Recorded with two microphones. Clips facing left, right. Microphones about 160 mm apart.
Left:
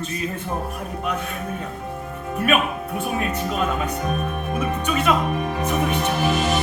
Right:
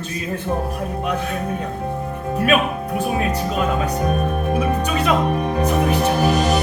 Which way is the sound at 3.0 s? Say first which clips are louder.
Right 3 dB; 30° right (ahead or behind).